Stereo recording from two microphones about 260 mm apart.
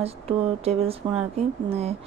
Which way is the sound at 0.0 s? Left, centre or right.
Right.